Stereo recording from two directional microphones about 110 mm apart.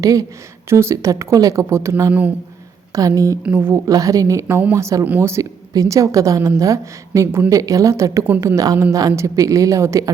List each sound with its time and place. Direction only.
0.0 s a woman's voice: 30° right (ahead or behind)
3.4 s speech: 20° right (ahead or behind)
3.8 s a woman's voice: 30° right (ahead or behind)